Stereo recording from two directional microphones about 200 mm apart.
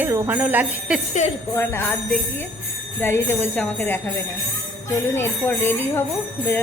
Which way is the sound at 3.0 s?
10° left (ahead or behind).